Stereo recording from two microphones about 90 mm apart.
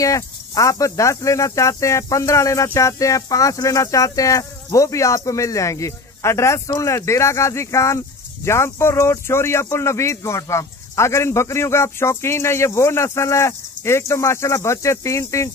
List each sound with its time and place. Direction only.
0.0 s speech: 35° left (ahead or behind)